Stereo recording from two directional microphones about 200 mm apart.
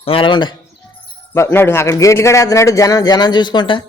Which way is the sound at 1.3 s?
10° left (ahead or behind).